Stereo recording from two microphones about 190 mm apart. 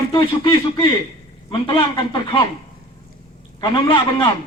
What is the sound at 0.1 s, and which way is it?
Speech, 25° left (ahead or behind).